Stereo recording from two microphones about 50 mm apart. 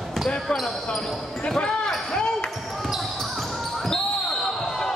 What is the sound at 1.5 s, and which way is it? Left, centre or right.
Basketball bounce, centre.